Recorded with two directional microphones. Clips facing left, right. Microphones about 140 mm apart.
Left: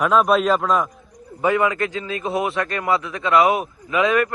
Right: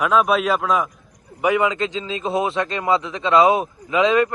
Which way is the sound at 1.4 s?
15° right (ahead or behind).